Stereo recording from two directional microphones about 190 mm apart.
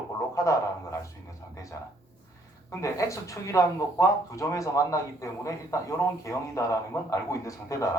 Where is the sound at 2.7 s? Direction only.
15° left (ahead or behind).